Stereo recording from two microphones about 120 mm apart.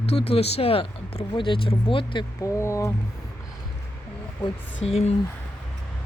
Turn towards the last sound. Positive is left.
turn(degrees=60)  # may be behind; listen again after turning